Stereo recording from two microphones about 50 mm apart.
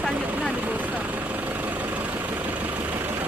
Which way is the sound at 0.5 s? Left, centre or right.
Right.